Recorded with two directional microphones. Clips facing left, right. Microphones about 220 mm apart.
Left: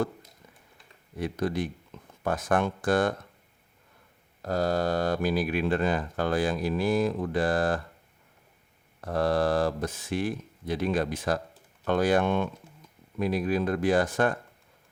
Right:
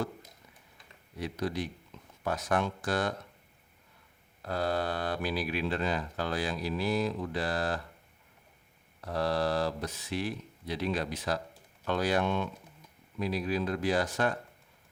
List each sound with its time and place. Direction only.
1.2 s speech: 50° left (ahead or behind)
4.4 s speech: 45° left (ahead or behind)
9.0 s speech: 50° left (ahead or behind)